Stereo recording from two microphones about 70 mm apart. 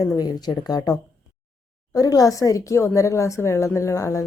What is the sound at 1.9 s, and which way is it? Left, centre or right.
A woman's voice, left.